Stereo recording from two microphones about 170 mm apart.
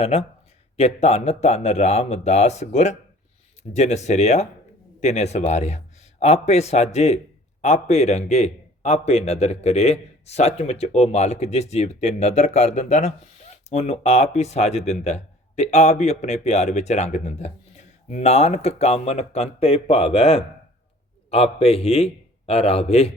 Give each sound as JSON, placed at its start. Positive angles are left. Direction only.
{"t": 0.0, "sound": "a man's voice", "side_deg": 35}